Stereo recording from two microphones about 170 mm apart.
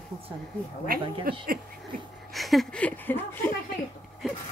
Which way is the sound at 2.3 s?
Centre (ahead or behind).